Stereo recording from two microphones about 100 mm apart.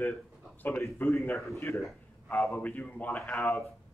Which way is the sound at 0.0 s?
20° left (ahead or behind).